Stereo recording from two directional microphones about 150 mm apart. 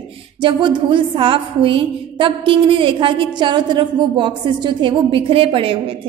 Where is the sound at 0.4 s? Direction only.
30° right (ahead or behind).